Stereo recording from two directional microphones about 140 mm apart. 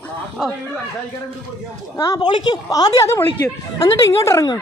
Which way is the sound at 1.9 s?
25° left (ahead or behind).